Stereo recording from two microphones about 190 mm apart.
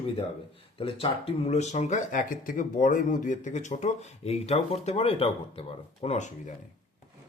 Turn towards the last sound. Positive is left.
turn(degrees=40)  # may be behind; listen again after turning